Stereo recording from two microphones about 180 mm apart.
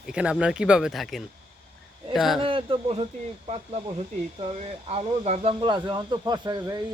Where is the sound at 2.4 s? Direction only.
30° right (ahead or behind).